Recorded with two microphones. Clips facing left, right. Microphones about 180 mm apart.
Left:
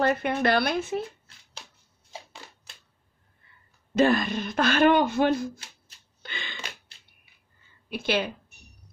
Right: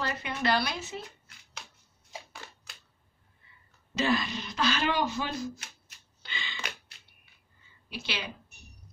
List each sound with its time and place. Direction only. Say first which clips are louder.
0.0 s speech: left 8 dB; 55° left (ahead or behind)
3.9 s speech: left 7 dB; 50° left (ahead or behind)
6.2 s a sound: left 2 dB; 55° left (ahead or behind)
7.9 s speech: left 11 dB; 50° left (ahead or behind)